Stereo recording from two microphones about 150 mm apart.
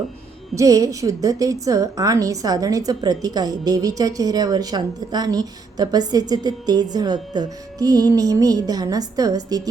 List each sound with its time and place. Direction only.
0.5 s a woman's voice: 20° right (ahead or behind)